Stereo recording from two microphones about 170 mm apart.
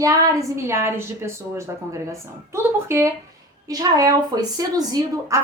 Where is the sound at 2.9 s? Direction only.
15° right (ahead or behind).